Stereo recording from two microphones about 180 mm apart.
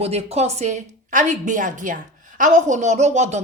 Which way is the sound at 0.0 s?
35° right (ahead or behind).